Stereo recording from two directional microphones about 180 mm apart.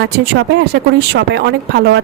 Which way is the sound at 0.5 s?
65° right (ahead or behind).